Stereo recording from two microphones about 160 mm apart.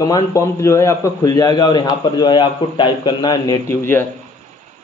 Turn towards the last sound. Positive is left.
turn(degrees=15)  # may be behind; listen again after turning